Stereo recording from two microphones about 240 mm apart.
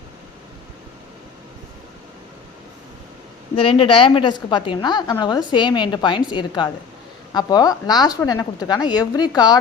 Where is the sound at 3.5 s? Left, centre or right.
Left.